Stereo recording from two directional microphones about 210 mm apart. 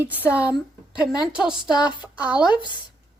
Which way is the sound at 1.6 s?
20° left (ahead or behind).